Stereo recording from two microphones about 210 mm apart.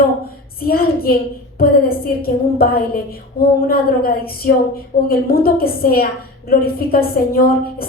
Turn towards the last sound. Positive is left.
turn(degrees=45)  # may be behind; listen again after turning